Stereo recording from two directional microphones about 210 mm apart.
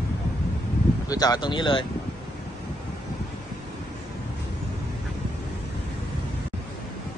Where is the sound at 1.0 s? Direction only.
20° left (ahead or behind).